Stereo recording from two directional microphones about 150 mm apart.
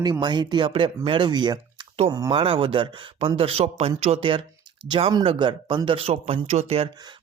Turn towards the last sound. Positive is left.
turn(degrees=-45)  # may be behind; listen again after turning